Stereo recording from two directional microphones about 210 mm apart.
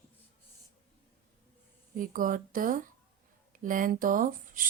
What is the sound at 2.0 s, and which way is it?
Speech, 40° right (ahead or behind).